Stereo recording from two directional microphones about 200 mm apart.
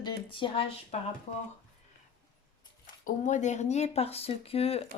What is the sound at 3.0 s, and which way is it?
Speech, 40° left (ahead or behind).